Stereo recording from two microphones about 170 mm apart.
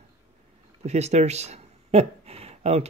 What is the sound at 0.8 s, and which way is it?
Speech, 40° right (ahead or behind).